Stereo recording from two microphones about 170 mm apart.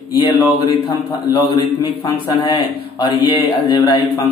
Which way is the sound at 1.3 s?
25° left (ahead or behind).